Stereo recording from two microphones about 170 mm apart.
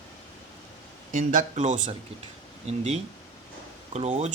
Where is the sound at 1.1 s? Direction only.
50° right (ahead or behind).